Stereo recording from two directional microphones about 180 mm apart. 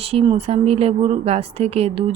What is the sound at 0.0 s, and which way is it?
Speech, 30° right (ahead or behind).